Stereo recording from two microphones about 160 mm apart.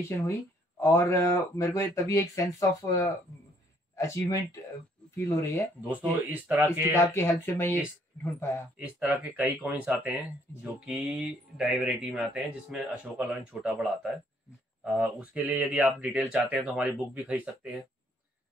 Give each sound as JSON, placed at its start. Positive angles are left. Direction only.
{"t": 0.3, "sound": "speech", "side_deg": 20}
{"t": 5.9, "sound": "speech", "side_deg": -10}
{"t": 6.9, "sound": "speech", "side_deg": 15}
{"t": 8.7, "sound": "speech", "side_deg": -10}